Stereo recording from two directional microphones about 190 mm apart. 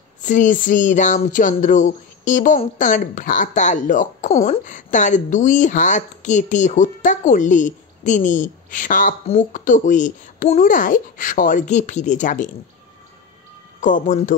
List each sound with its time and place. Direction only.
0.2 s a woman's voice: 40° left (ahead or behind)
13.7 s speech: 45° left (ahead or behind)